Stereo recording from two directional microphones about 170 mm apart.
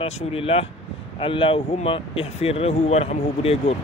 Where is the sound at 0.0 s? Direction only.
35° left (ahead or behind).